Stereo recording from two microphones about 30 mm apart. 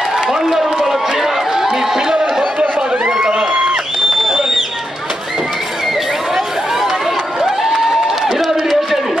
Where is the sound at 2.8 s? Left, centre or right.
Right.